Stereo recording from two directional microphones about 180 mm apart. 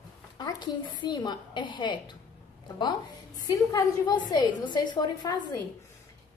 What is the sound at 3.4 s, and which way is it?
A woman's voice, 20° left (ahead or behind).